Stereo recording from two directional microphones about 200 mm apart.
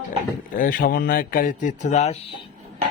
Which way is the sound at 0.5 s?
45° left (ahead or behind).